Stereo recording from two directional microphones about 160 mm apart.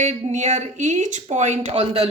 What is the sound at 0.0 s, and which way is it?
Speech, 45° right (ahead or behind).